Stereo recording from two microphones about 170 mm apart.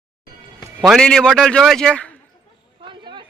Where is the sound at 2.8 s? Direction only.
30° right (ahead or behind).